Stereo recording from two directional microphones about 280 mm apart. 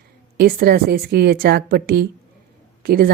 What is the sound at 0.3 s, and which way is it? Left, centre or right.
Speech, right.